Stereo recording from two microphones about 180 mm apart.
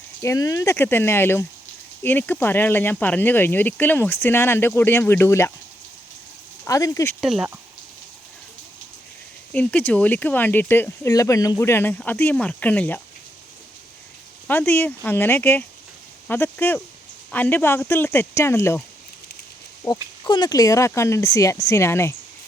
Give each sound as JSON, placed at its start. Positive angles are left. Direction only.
{"t": 0.2, "sound": "speech", "side_deg": 20}
{"t": 6.7, "sound": "speech", "side_deg": 20}
{"t": 7.2, "sound": "speech", "side_deg": -5}
{"t": 9.5, "sound": "speech", "side_deg": 10}
{"t": 14.4, "sound": "speech", "side_deg": 10}
{"t": 19.8, "sound": "speech", "side_deg": 20}